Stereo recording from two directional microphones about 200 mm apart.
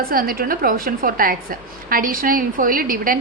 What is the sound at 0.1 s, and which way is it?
A woman's voice, 45° right (ahead or behind).